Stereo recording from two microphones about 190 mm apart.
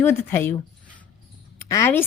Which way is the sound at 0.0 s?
10° left (ahead or behind).